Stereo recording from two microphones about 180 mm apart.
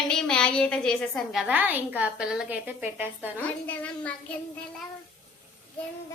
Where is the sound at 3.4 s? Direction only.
10° left (ahead or behind).